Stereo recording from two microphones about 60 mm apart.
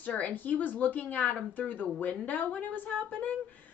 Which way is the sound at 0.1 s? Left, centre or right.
Left.